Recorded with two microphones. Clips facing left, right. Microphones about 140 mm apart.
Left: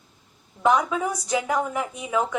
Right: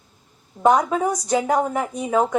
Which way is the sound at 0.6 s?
40° right (ahead or behind).